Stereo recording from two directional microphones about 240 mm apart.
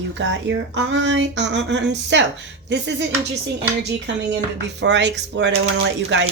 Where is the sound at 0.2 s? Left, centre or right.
Right.